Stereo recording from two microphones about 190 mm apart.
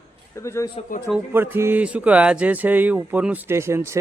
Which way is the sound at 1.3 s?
10° right (ahead or behind).